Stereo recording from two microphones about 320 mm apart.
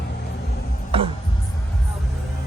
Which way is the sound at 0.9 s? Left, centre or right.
Centre.